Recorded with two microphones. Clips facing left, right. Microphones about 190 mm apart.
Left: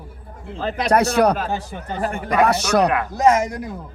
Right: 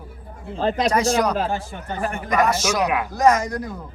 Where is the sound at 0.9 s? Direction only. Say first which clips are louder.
Left 7 dB; 60° left (ahead or behind).